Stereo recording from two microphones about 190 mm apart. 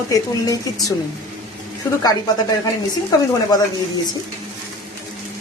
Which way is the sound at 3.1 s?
20° left (ahead or behind).